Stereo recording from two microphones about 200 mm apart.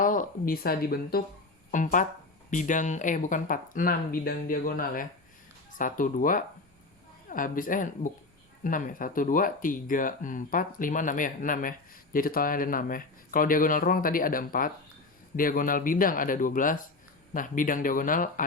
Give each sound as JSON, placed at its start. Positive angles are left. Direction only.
{"t": 0.0, "sound": "speech", "side_deg": 40}